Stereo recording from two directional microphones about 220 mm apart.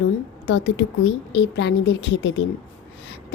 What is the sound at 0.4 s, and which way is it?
A woman's voice, 50° left (ahead or behind).